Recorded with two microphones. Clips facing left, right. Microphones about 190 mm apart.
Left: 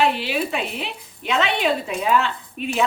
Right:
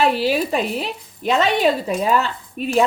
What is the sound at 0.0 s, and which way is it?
Speech, 40° right (ahead or behind).